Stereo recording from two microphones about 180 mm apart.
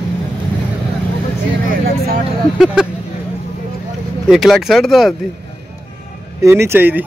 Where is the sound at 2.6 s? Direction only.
5° right (ahead or behind).